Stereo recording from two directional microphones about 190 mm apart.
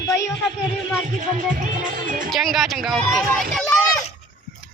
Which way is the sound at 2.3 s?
Centre (ahead or behind).